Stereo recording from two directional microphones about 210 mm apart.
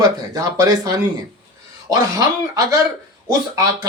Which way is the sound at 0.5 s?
15° right (ahead or behind).